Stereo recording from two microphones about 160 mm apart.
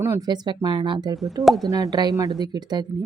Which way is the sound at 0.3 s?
30° right (ahead or behind).